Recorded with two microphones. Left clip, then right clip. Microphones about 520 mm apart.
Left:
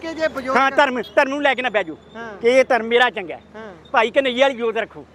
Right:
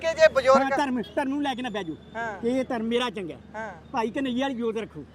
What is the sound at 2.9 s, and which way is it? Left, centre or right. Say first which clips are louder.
Speech: left 11 dB; left.